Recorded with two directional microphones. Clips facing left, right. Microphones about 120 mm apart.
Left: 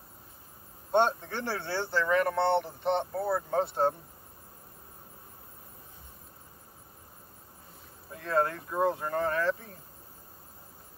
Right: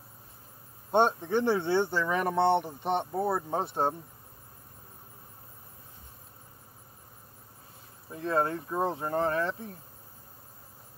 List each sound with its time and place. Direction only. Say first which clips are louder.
0.9 s speech: right 2 dB; 15° right (ahead or behind)
8.1 s speech: even; 20° right (ahead or behind)